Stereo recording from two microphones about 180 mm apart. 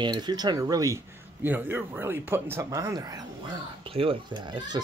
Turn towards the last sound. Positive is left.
turn(degrees=-25)  # may be behind; listen again after turning